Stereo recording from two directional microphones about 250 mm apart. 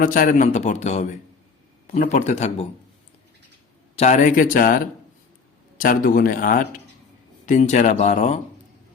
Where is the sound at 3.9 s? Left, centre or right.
Left.